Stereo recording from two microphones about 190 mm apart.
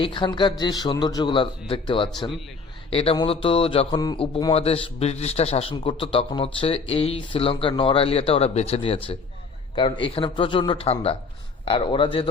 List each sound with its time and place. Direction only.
0.0 s a man's voice: 25° left (ahead or behind)
4.5 s a man's voice: 30° left (ahead or behind)